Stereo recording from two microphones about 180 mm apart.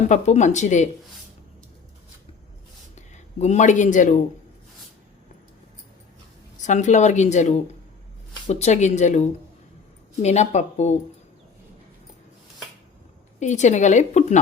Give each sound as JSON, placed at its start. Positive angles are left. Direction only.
{"t": 0.0, "sound": "a woman's voice", "side_deg": 40}
{"t": 2.9, "sound": "speech", "side_deg": 40}
{"t": 6.6, "sound": "a woman's voice", "side_deg": 40}
{"t": 10.2, "sound": "a woman's voice", "side_deg": 40}
{"t": 13.4, "sound": "a woman's voice", "side_deg": 40}